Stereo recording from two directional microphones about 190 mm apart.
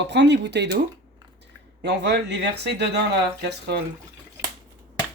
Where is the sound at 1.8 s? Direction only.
65° right (ahead or behind).